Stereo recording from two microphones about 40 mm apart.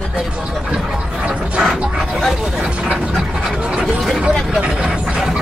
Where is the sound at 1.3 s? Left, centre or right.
Right.